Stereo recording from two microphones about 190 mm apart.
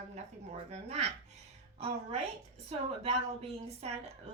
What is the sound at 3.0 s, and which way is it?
A woman's voice, 30° right (ahead or behind).